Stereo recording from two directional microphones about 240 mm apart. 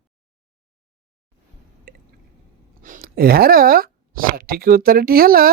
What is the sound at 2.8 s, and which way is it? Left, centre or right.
Speech, right.